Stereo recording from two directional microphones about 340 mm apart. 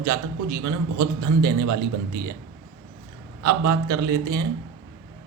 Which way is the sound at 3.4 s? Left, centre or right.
Right.